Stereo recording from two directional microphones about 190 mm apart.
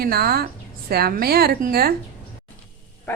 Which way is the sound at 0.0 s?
55° right (ahead or behind).